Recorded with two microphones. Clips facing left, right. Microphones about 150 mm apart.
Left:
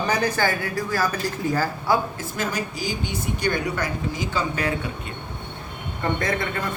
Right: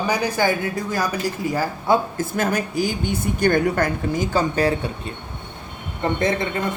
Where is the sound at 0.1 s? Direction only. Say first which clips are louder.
Right 2 dB; 10° right (ahead or behind).